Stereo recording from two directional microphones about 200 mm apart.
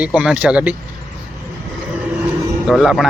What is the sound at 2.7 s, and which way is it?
Speech, centre (ahead or behind).